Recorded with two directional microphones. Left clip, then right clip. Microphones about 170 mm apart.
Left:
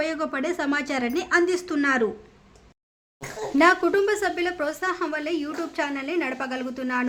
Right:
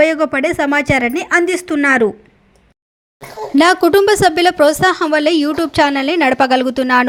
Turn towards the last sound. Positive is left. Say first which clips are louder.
# right 15 dB
turn(degrees=-50)  # may be behind; listen again after turning